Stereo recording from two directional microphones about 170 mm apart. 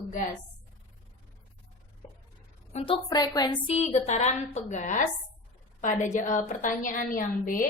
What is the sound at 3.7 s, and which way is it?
A woman's voice, 40° left (ahead or behind).